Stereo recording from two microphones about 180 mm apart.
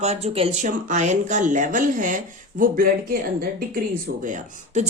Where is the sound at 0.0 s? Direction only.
35° right (ahead or behind).